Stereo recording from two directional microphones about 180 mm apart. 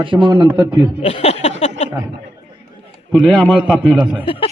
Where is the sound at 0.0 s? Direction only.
30° right (ahead or behind).